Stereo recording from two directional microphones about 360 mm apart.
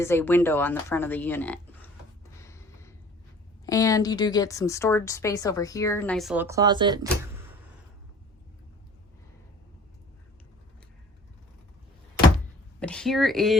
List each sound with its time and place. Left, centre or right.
0.0 s speech: centre
2.4 s a sound: centre
3.7 s speech: centre
12.8 s speech: centre